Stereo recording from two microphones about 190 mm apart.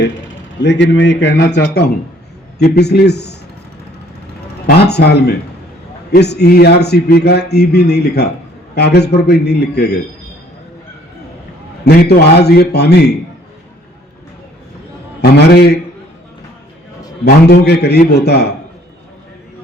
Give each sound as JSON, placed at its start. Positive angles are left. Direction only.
{"t": 0.6, "sound": "a man's voice", "side_deg": 70}
{"t": 4.6, "sound": "a man's voice", "side_deg": 60}
{"t": 11.9, "sound": "a man's voice", "side_deg": 55}
{"t": 15.2, "sound": "a man's voice", "side_deg": 55}
{"t": 17.2, "sound": "a man's voice", "side_deg": 60}